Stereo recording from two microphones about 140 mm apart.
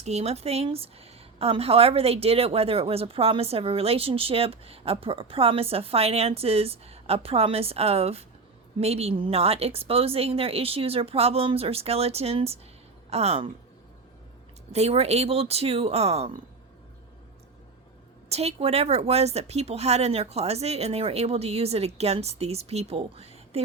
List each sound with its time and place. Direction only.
0.0 s speech: 50° right (ahead or behind)
14.7 s speech: 50° right (ahead or behind)
18.3 s speech: 50° right (ahead or behind)